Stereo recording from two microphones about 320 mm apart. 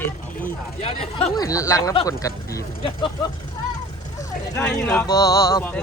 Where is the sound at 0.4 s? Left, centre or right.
Centre.